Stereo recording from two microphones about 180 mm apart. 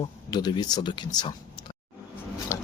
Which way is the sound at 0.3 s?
25° left (ahead or behind).